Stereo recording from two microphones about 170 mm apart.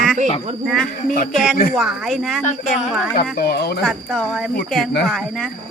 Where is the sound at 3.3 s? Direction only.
65° left (ahead or behind).